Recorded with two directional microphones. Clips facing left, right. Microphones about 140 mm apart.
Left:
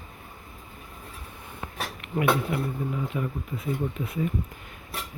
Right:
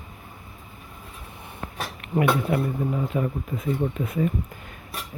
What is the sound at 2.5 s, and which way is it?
Speech, 45° right (ahead or behind).